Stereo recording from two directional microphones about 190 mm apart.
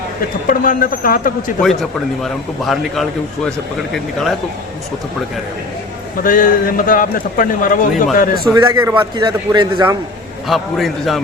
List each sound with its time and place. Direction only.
0.4 s a man's voice: 45° left (ahead or behind)
1.6 s a man's voice: centre (ahead or behind)
6.2 s a man's voice: 45° left (ahead or behind)
8.5 s a man's voice: 20° right (ahead or behind)
10.4 s a man's voice: centre (ahead or behind)